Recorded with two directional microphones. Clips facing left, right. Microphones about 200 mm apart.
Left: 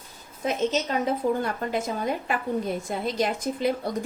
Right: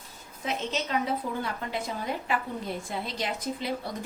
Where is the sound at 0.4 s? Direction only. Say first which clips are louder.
Left 6 dB; 45° left (ahead or behind).